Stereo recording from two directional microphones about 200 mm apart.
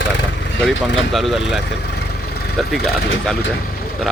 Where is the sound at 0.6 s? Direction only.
Centre (ahead or behind).